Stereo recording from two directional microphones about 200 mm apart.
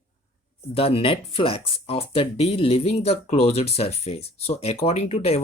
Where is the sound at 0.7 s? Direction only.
30° left (ahead or behind).